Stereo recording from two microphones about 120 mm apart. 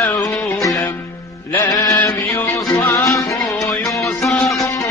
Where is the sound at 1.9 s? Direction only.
20° left (ahead or behind).